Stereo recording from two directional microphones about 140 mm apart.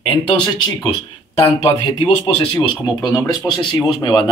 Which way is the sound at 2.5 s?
30° left (ahead or behind).